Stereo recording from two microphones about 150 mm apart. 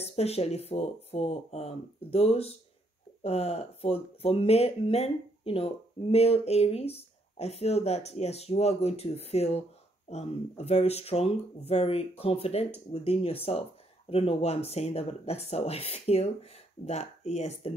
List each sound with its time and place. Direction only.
0.0 s speech: 45° left (ahead or behind)